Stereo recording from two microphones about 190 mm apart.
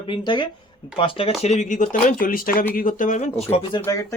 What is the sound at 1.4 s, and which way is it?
A man's voice, 40° left (ahead or behind).